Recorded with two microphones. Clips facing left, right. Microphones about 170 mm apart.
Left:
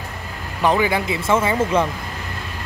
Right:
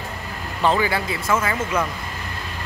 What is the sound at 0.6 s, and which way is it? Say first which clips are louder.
Speech: left 2 dB; 15° left (ahead or behind).